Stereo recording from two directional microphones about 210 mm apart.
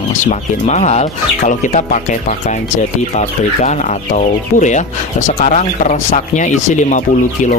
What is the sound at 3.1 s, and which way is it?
Speech, 35° left (ahead or behind).